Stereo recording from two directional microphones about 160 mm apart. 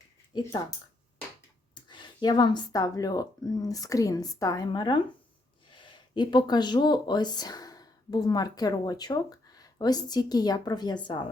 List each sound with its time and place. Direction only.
1.7 s speech: 30° left (ahead or behind)